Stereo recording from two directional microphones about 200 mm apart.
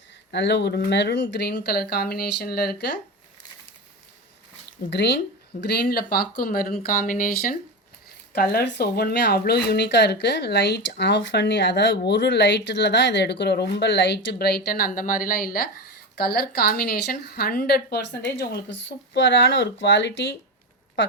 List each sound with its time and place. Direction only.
0.3 s speech: 60° left (ahead or behind)
4.9 s speech: 60° left (ahead or behind)